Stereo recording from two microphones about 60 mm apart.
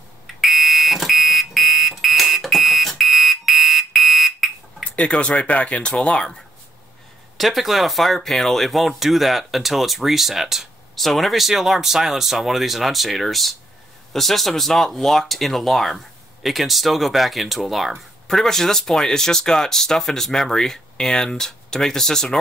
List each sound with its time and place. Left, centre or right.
0.4 s fire alarm: centre
4.9 s speech: centre
7.3 s speech: centre